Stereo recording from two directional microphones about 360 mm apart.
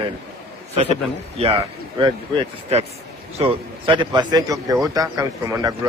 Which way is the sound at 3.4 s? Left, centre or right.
Centre.